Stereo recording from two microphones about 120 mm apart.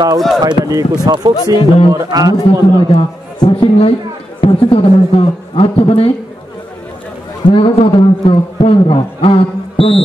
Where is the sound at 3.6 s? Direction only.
50° left (ahead or behind).